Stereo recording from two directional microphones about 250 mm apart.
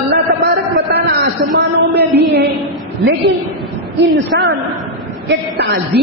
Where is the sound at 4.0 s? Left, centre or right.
Right.